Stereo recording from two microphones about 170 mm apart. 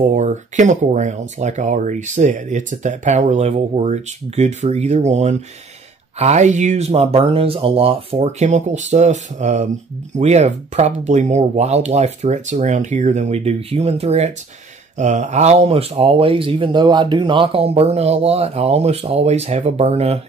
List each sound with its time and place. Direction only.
0.0 s speech: 45° right (ahead or behind)